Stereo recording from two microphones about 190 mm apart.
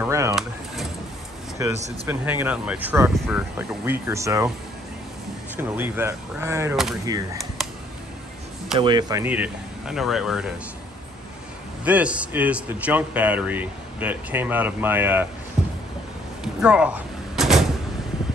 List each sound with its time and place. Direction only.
0.0 s a sound: 15° right (ahead or behind)
1.6 s speech: 15° right (ahead or behind)
5.6 s speech: 10° right (ahead or behind)
8.7 s speech: 25° right (ahead or behind)
9.2 s speech: 10° right (ahead or behind)
11.8 s speech: 5° right (ahead or behind)
15.6 s a sound: 5° right (ahead or behind)
16.6 s door: 5° right (ahead or behind)